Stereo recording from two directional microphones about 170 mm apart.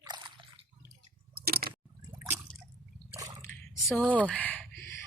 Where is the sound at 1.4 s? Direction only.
65° right (ahead or behind).